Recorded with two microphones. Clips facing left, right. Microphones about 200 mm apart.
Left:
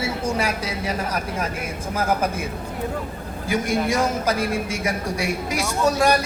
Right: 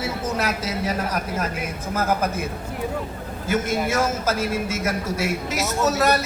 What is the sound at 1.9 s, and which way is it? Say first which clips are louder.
Speech: even; 10° left (ahead or behind).